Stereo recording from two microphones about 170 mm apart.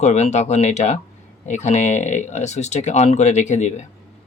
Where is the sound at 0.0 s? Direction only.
40° left (ahead or behind).